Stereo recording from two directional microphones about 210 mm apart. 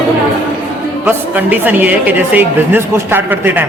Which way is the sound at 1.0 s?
10° right (ahead or behind).